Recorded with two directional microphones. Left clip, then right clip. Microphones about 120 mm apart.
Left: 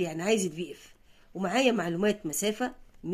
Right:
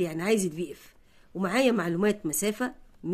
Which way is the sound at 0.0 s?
35° right (ahead or behind).